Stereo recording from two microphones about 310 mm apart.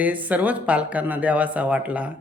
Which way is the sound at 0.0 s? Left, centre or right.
Centre.